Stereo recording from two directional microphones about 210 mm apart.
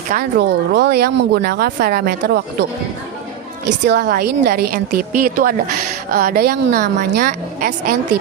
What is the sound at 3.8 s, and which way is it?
Speech, 50° right (ahead or behind).